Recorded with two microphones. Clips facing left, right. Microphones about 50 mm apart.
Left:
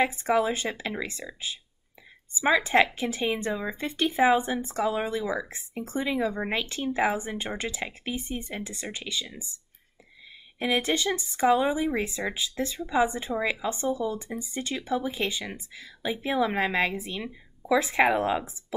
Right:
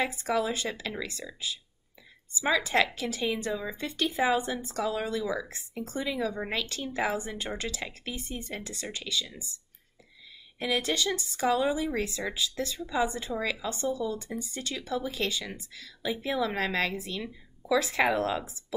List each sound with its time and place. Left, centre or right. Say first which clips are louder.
0.0 s speech: left 4 dB; left
10.6 s speech: left 3 dB; left
18.7 s a sound: left 2 dB; left